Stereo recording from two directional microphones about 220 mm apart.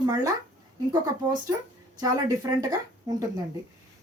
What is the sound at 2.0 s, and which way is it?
Speech, 15° right (ahead or behind).